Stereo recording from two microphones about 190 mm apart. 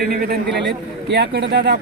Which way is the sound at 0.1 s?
55° right (ahead or behind).